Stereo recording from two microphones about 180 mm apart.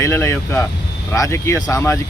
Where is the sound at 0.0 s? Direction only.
15° left (ahead or behind).